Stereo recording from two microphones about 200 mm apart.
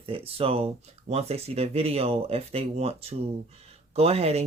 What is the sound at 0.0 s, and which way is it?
Speech, 30° right (ahead or behind).